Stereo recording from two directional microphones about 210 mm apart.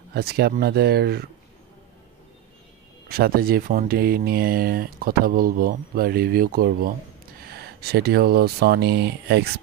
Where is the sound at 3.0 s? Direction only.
45° right (ahead or behind).